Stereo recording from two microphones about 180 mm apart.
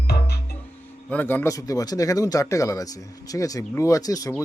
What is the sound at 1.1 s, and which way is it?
Speech, 10° left (ahead or behind).